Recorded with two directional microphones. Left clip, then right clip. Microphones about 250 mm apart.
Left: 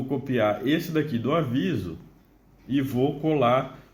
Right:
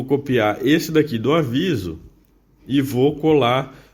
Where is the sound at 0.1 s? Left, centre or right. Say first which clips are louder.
Right 6 dB; right.